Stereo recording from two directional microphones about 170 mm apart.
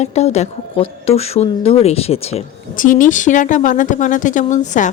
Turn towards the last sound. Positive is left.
turn(degrees=45)  # may be behind; listen again after turning